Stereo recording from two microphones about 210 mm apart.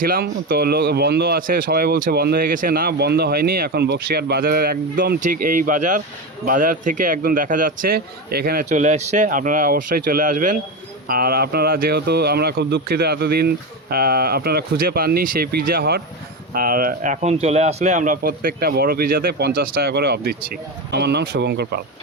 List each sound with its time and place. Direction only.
0.0 s a man's voice: 45° right (ahead or behind)